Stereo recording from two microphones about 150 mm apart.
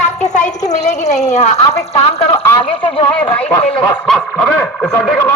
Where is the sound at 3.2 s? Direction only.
10° left (ahead or behind).